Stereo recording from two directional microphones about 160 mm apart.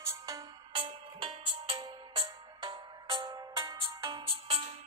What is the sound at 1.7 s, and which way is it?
Music, 30° right (ahead or behind).